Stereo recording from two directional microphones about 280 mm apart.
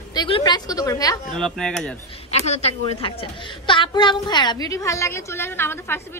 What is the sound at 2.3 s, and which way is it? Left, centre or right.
A woman's voice, left.